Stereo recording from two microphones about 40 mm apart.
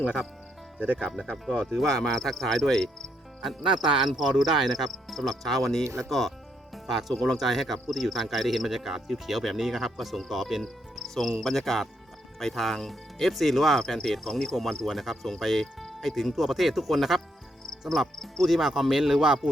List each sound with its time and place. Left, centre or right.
1.3 s speech: left
1.7 s cricket: centre
3.8 s speech: centre
10.6 s cricket: centre
11.3 s speech: centre
13.7 s cricket: centre
14.9 s speech: centre
15.6 s music: centre
16.0 s speech: centre
17.7 s speech: centre
18.5 s speech: centre